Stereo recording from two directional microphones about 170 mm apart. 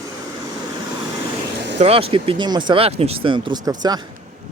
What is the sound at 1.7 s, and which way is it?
A man's voice, 35° right (ahead or behind).